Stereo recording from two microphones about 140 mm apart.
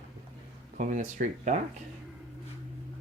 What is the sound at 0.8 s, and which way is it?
Speech, 60° right (ahead or behind).